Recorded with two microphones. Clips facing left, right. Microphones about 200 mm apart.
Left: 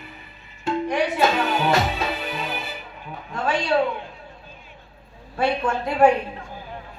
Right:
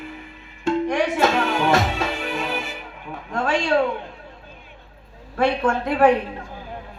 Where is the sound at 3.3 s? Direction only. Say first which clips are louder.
Right 2 dB; 80° right.